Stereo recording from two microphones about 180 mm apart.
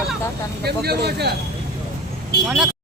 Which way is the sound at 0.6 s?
60° right (ahead or behind).